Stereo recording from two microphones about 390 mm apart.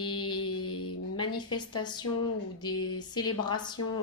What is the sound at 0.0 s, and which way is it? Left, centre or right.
Mantra, centre.